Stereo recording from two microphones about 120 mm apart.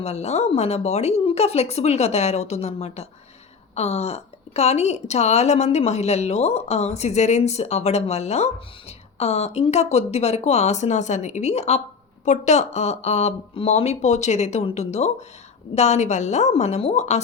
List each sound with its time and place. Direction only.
0.0 s a woman's voice: 60° left (ahead or behind)
12.2 s speech: 80° left; by 17.2 s 65° left (ahead or behind)